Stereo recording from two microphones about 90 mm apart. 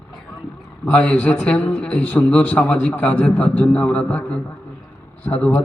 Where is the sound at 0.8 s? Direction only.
15° left (ahead or behind).